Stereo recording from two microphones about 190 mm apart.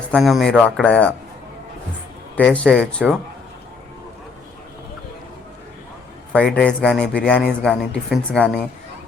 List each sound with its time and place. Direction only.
0.1 s a man's voice: centre (ahead or behind)
2.3 s a man's voice: 5° left (ahead or behind)
2.7 s speech: 10° right (ahead or behind)
6.3 s a man's voice: 5° left (ahead or behind)